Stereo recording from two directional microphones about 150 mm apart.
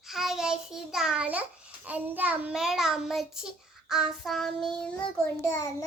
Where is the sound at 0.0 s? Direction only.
Centre (ahead or behind).